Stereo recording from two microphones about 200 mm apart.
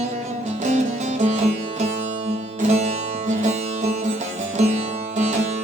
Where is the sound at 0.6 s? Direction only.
35° right (ahead or behind).